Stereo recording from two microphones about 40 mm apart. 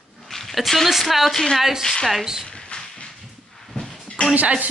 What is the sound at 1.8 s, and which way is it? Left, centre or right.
Speech, centre.